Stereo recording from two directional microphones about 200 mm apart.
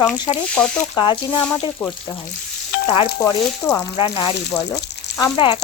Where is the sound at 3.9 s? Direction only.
25° left (ahead or behind).